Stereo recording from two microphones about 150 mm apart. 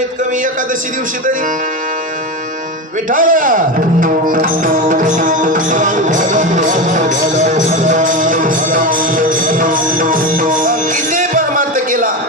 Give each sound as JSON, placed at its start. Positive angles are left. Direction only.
{"t": 3.1, "sound": "music", "side_deg": -65}